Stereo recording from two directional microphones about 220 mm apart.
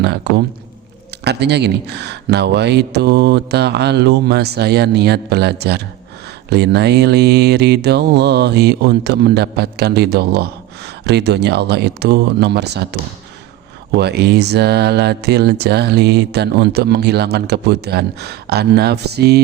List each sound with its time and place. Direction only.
0.0 s mantra: 50° right (ahead or behind)